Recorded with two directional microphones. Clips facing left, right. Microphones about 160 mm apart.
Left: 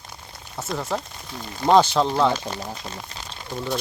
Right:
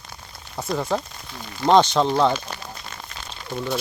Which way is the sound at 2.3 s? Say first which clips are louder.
Left 1 dB; 40° left (ahead or behind).